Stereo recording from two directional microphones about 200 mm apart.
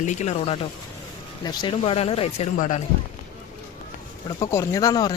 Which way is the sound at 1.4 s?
20° left (ahead or behind).